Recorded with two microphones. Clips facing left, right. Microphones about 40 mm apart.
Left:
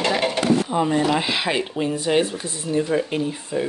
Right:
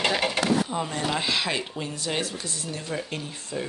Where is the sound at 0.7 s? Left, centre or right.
Centre.